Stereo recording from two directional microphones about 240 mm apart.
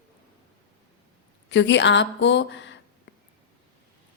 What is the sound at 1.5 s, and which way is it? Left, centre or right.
A woman's voice, left.